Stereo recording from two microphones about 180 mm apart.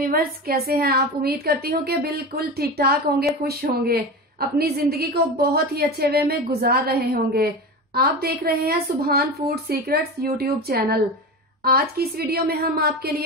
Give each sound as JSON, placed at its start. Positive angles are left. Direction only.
{"t": 0.0, "sound": "a woman's voice", "side_deg": -55}